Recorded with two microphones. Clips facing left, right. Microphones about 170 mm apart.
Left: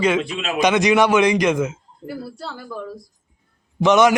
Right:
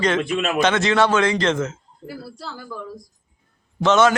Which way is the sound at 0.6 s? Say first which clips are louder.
Left 3 dB; 15° left (ahead or behind).